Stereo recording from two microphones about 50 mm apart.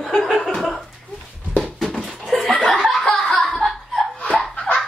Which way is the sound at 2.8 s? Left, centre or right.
Centre.